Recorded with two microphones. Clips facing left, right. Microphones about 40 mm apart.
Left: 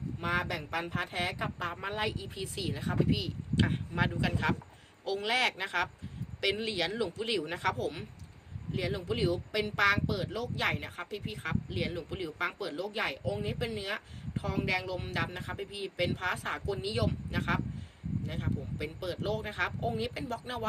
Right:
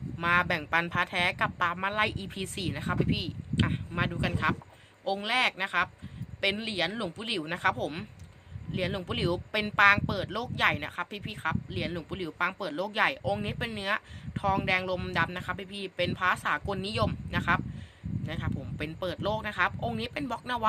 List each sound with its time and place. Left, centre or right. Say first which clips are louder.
0.2 s a woman's voice: right 7 dB; right
1.7 s speech: right 5 dB; right
3.6 s speech: right 1 dB; centre; by 11.3 s right
11.9 s speech: right 2 dB; right
12.7 s speech: right 6 dB; right
13.4 s speech: right 1 dB; right